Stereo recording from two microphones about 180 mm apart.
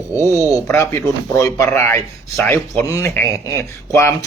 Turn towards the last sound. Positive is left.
turn(degrees=15)  # may be behind; listen again after turning